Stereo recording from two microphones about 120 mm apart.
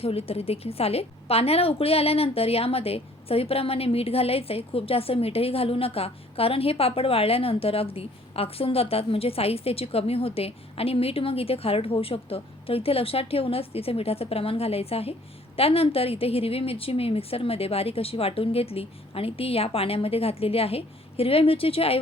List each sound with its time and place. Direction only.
0.0 s a woman's voice: 55° left (ahead or behind)